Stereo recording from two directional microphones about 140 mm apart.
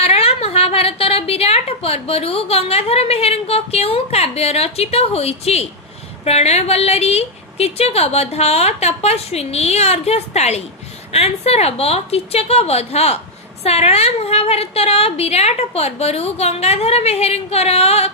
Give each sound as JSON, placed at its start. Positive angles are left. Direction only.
{"t": 0.0, "sound": "a woman's voice", "side_deg": 45}